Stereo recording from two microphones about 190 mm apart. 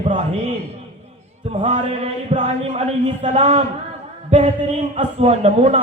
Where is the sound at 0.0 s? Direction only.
35° right (ahead or behind).